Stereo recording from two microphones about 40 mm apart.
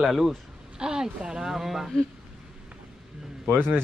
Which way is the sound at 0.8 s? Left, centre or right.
Centre.